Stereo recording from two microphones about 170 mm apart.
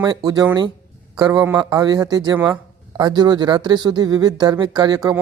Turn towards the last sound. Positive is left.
turn(degrees=-25)  # may be behind; listen again after turning